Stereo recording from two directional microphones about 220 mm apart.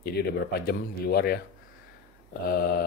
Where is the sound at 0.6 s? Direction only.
45° left (ahead or behind).